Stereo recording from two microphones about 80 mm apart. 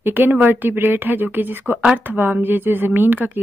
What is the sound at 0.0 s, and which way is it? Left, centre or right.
Speech, right.